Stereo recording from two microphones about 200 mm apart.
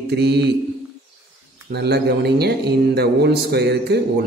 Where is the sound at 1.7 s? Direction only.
55° right (ahead or behind).